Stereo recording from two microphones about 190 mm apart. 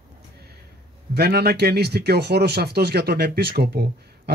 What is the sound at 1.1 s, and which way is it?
Speech, 55° right (ahead or behind).